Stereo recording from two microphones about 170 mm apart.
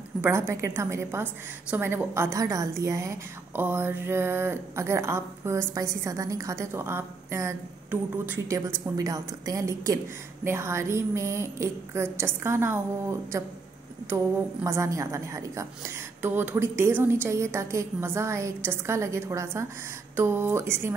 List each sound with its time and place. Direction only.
0.2 s a woman's voice: 15° right (ahead or behind)